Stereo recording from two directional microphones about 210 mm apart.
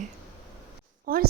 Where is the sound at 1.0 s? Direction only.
45° right (ahead or behind).